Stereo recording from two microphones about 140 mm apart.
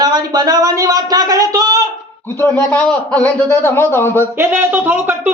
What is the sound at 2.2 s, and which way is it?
A man's voice, 15° left (ahead or behind).